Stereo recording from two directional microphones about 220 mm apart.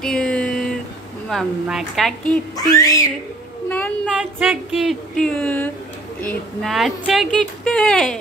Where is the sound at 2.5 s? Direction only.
15° left (ahead or behind).